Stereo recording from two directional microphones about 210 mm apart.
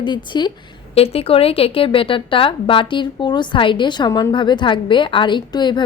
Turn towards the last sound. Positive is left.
turn(degrees=20)  # may be behind; listen again after turning